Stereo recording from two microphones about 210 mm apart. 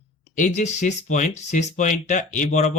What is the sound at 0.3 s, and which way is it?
Speech, 35° left (ahead or behind).